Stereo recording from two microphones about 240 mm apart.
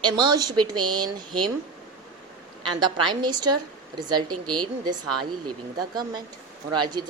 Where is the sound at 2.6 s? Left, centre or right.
Centre.